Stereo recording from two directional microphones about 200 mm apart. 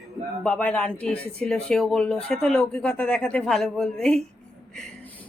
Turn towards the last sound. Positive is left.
turn(degrees=5)  # may be behind; listen again after turning